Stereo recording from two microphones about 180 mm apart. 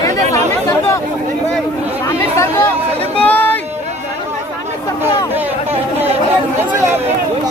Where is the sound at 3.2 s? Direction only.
10° left (ahead or behind).